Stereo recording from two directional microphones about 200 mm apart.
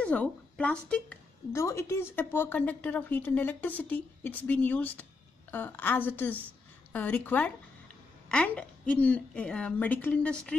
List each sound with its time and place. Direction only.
0.0 s a woman's voice: 5° left (ahead or behind)